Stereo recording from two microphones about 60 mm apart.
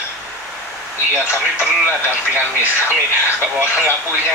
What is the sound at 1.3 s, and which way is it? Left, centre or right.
Speech, right.